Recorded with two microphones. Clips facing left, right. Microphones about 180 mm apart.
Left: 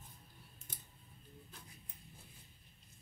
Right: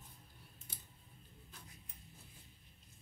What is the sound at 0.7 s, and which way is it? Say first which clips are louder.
Scissors: left 2 dB; 50° left (ahead or behind).